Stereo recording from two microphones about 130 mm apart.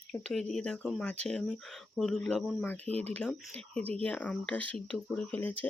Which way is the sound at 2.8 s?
55° right (ahead or behind).